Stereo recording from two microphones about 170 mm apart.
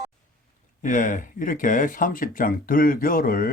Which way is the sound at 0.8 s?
50° left (ahead or behind).